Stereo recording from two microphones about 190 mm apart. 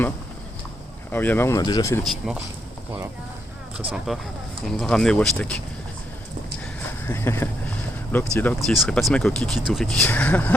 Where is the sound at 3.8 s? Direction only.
5° right (ahead or behind).